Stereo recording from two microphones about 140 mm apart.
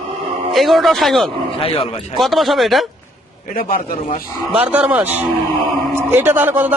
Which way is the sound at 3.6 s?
90° left.